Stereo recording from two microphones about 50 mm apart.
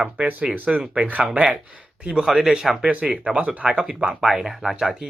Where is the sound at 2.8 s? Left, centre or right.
Right.